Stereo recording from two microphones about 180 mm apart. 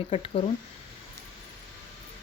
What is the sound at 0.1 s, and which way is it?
Speech, 30° left (ahead or behind).